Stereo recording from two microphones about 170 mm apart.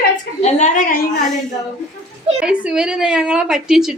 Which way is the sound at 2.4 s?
5° right (ahead or behind).